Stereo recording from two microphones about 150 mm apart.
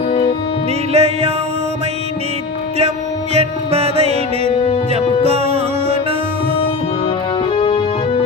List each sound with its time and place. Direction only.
0.1 s music: 40° left (ahead or behind)
0.9 s music: 45° right (ahead or behind)
3.3 s music: 40° right (ahead or behind)
5.2 s music: 45° right (ahead or behind)
7.5 s music: 40° left (ahead or behind)